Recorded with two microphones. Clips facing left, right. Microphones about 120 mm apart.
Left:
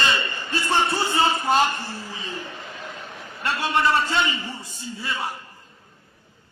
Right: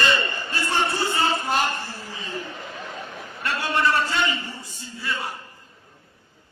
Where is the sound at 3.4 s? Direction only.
20° left (ahead or behind).